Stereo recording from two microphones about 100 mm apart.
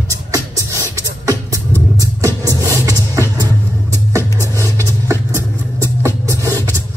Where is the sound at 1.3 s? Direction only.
35° right (ahead or behind).